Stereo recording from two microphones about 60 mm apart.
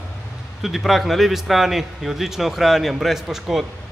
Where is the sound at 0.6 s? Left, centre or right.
Centre.